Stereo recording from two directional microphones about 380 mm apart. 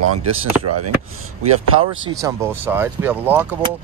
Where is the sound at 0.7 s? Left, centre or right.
Right.